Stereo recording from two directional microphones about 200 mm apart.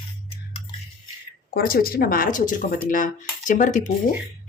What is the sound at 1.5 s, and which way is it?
Speech, 50° left (ahead or behind).